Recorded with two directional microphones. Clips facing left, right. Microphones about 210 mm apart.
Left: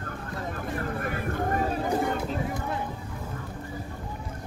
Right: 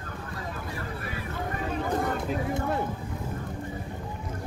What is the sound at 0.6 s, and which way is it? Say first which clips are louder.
Boat: left 5 dB; 50° left (ahead or behind).